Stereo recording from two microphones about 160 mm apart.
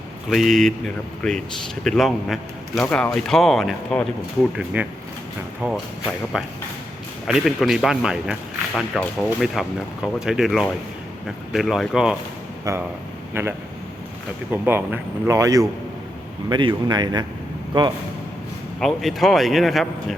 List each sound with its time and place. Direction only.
0.3 s speech: centre (ahead or behind)
4.5 s a man's voice: 10° right (ahead or behind)
8.7 s speech: 5° left (ahead or behind)
9.4 s speech: 5° right (ahead or behind)
13.4 s a man's voice: 15° right (ahead or behind)
14.5 s a man's voice: 10° right (ahead or behind)
18.8 s speech: centre (ahead or behind)